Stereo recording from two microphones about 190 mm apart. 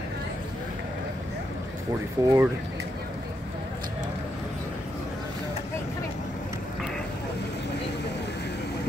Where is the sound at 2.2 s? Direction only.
20° right (ahead or behind).